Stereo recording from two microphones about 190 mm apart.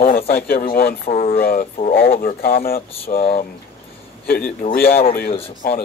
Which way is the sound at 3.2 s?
30° left (ahead or behind).